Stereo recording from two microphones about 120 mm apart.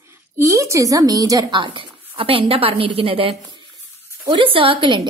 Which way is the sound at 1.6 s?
45° right (ahead or behind).